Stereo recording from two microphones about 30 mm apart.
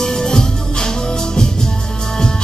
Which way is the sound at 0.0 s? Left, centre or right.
Centre.